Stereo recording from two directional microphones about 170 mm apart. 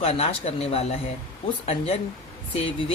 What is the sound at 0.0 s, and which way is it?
Speech, 35° left (ahead or behind).